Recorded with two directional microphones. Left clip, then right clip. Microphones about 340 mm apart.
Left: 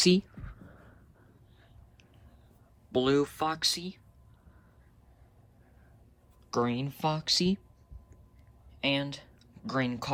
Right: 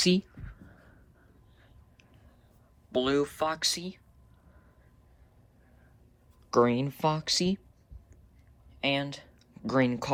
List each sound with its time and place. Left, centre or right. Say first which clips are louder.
0.0 s a sound: left 1 dB; left
2.9 s speech: even; centre
6.5 s speech: right 6 dB; centre
8.8 s speech: right 1 dB; centre